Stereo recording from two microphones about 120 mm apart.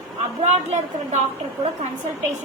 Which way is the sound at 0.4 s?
70° right (ahead or behind).